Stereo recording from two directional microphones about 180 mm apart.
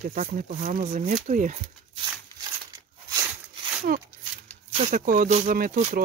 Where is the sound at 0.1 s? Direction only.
45° right (ahead or behind).